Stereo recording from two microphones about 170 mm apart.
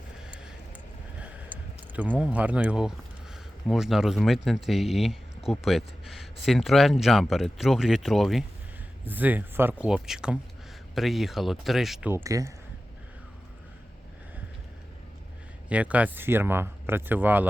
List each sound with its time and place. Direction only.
0.3 s vehicle: 5° right (ahead or behind)
1.2 s a sound: 10° right (ahead or behind)
3.7 s speech: centre (ahead or behind)
9.0 s speech: 10° right (ahead or behind)
12.1 s speech: 20° right (ahead or behind)
15.7 s speech: 10° right (ahead or behind)